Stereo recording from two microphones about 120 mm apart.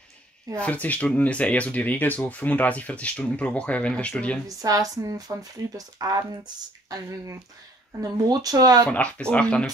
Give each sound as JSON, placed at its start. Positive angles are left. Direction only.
{"t": 0.6, "sound": "speech", "side_deg": 15}
{"t": 4.6, "sound": "speech", "side_deg": -30}
{"t": 8.0, "sound": "speech", "side_deg": -30}
{"t": 8.8, "sound": "speech", "side_deg": 10}